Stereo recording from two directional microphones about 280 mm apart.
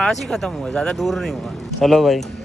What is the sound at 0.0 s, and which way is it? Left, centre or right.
A man's voice, centre.